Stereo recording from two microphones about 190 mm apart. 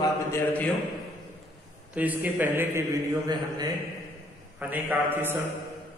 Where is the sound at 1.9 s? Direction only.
10° right (ahead or behind).